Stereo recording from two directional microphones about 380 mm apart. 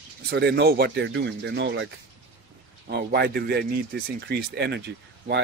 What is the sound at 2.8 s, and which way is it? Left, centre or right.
Speech, right.